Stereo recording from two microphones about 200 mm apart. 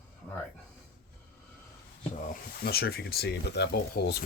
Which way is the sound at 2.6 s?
50° left (ahead or behind).